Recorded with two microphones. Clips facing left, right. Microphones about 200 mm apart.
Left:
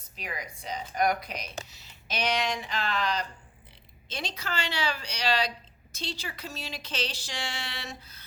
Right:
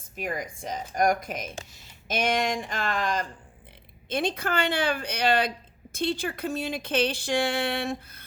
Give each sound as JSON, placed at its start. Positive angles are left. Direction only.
{"t": 0.0, "sound": "speech", "side_deg": -50}